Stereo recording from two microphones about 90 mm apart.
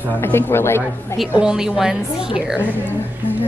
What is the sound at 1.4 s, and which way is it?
A woman's voice, 10° right (ahead or behind).